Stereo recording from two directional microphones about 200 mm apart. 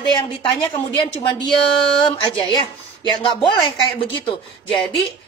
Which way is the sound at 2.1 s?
20° left (ahead or behind).